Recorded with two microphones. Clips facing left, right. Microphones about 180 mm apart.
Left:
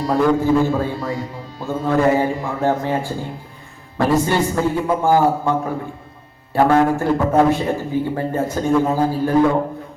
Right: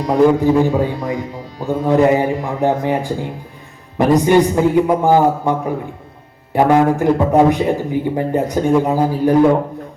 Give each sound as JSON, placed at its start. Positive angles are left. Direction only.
{"t": 0.0, "sound": "a man's voice", "side_deg": -20}